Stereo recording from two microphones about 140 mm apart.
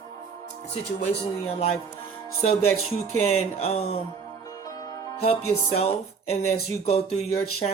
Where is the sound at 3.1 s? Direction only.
50° left (ahead or behind).